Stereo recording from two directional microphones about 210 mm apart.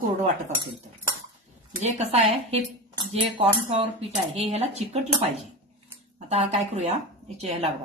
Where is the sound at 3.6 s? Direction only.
30° right (ahead or behind).